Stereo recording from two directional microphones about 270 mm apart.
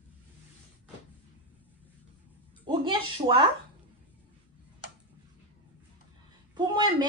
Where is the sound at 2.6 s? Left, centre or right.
Centre.